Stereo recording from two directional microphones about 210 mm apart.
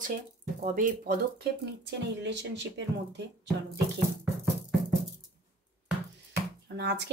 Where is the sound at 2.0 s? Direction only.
55° right (ahead or behind).